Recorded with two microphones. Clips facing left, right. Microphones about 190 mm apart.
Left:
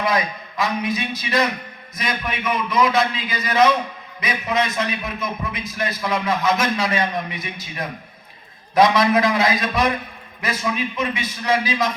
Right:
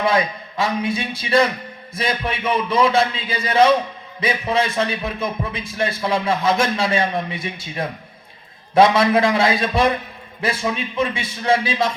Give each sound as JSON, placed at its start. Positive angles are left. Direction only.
{"t": 0.0, "sound": "speech", "side_deg": -30}